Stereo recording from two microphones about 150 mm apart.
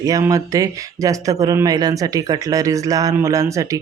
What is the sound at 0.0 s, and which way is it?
Speech, 25° right (ahead or behind).